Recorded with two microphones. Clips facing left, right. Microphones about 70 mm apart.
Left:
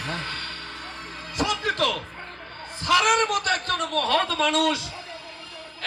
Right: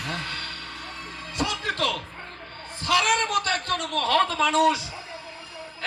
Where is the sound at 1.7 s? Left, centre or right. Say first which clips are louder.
Left 2 dB; centre.